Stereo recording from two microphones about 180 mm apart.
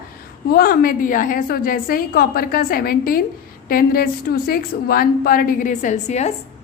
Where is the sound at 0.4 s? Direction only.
60° left (ahead or behind); by 6.3 s 40° left (ahead or behind).